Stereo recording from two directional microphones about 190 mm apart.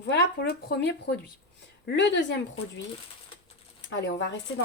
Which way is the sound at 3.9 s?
70° left (ahead or behind).